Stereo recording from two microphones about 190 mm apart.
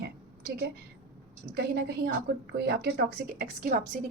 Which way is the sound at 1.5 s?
60° right (ahead or behind).